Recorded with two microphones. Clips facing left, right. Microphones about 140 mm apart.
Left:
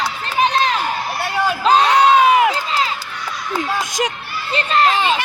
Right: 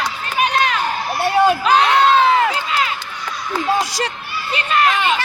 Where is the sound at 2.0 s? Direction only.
15° left (ahead or behind).